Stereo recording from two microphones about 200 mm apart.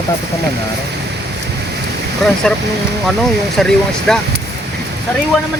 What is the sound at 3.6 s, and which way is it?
Speech, 5° left (ahead or behind).